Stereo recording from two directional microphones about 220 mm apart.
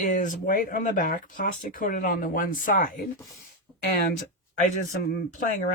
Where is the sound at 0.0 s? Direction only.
35° left (ahead or behind).